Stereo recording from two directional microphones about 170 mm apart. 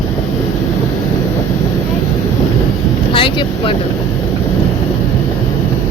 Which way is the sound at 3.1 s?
30° left (ahead or behind).